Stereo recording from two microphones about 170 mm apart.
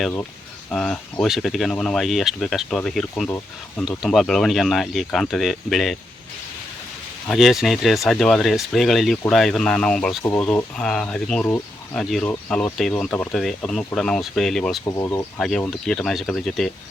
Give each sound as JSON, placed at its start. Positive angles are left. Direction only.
{"t": 0.7, "sound": "speech", "side_deg": 5}
{"t": 7.3, "sound": "speech", "side_deg": 0}
{"t": 14.8, "sound": "speech", "side_deg": 15}